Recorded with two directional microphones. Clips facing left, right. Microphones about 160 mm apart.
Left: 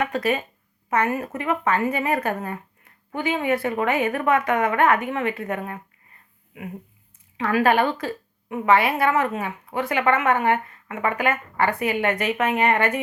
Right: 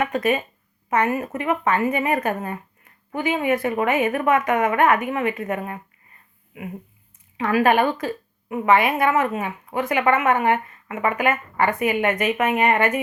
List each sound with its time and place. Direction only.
0.0 s a woman's voice: 15° right (ahead or behind)
7.4 s a woman's voice: 15° right (ahead or behind)